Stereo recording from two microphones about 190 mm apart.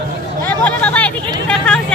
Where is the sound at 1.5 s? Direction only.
5° left (ahead or behind).